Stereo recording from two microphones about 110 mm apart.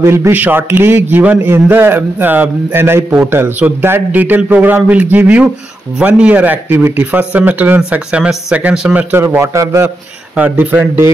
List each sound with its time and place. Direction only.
0.0 s a man's voice: 25° right (ahead or behind)
9.1 s a man's voice: 20° right (ahead or behind)
10.3 s speech: 15° right (ahead or behind)